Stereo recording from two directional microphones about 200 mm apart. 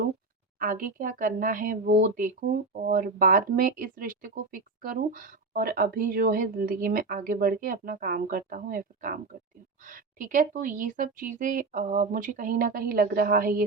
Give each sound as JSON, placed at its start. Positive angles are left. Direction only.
{"t": 0.6, "sound": "speech", "side_deg": -45}